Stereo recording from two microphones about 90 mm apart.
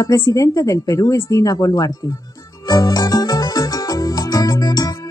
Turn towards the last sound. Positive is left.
turn(degrees=40)  # may be behind; listen again after turning